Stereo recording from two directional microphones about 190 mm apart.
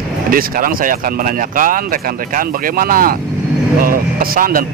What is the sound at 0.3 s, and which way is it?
Speech, 50° right (ahead or behind).